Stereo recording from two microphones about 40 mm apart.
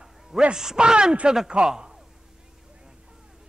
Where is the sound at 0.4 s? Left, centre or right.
Right.